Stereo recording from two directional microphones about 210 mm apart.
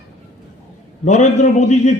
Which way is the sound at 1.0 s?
35° left (ahead or behind).